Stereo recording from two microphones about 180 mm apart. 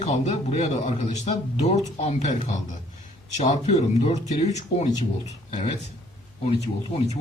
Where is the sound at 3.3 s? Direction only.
40° left (ahead or behind).